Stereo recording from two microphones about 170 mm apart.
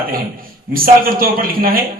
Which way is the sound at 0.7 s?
60° right (ahead or behind).